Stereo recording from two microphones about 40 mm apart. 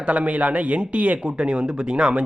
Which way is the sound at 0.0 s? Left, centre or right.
Right.